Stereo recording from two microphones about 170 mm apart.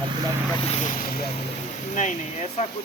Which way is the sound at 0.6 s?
40° left (ahead or behind).